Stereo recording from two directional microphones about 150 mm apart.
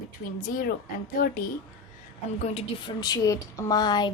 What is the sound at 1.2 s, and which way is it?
Speech, 75° left (ahead or behind).